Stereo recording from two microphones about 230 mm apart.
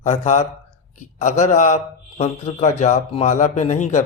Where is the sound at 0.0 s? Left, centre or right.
Left.